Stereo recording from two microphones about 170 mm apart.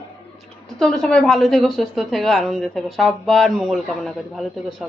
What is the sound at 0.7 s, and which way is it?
A woman's voice, 5° left (ahead or behind).